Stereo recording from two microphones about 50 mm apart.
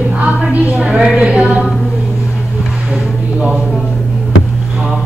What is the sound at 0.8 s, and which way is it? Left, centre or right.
Music, centre.